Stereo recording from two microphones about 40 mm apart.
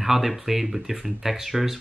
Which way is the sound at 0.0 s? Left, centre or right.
Centre.